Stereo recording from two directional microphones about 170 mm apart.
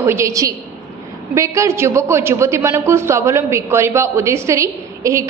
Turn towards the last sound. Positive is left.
turn(degrees=-15)  # may be behind; listen again after turning